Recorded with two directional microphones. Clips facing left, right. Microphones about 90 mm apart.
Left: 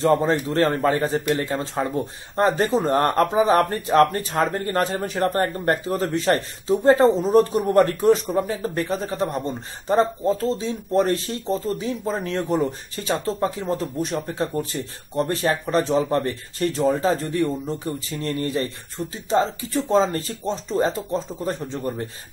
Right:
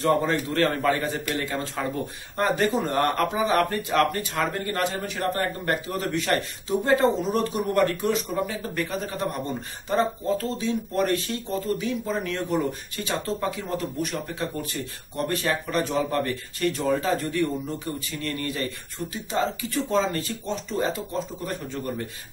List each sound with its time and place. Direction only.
0.0 s a man's voice: 30° left (ahead or behind)